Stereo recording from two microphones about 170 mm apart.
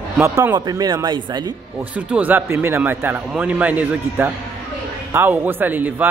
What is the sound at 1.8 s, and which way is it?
Speech, 10° right (ahead or behind).